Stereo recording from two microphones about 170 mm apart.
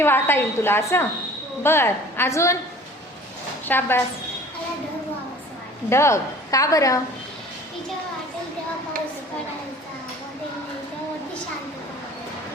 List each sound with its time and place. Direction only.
0.0 s a woman's voice: 15° left (ahead or behind)
3.7 s a woman's voice: 15° left (ahead or behind)
5.9 s a woman's voice: 15° left (ahead or behind)